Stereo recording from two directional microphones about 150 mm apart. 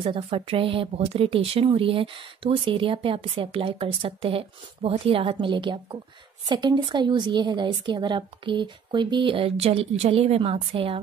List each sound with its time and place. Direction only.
0.0 s speech: 40° right (ahead or behind)